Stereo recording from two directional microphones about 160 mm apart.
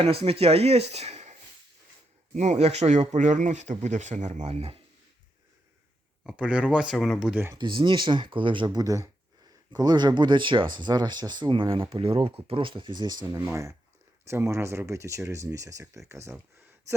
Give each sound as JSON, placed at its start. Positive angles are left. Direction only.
{"t": 0.0, "sound": "speech", "side_deg": -35}
{"t": 6.2, "sound": "speech", "side_deg": -5}
{"t": 7.5, "sound": "speech", "side_deg": -30}